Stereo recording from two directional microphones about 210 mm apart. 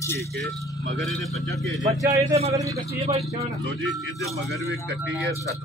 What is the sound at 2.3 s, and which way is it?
Speech, 30° right (ahead or behind).